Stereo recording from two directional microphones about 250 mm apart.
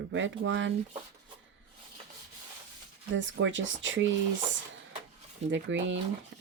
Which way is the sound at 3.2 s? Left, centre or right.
Right.